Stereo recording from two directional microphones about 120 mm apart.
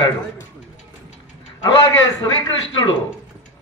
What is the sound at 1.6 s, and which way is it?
A man's voice, 35° left (ahead or behind).